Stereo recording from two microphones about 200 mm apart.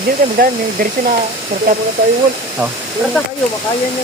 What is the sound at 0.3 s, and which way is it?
Speech, 45° right (ahead or behind).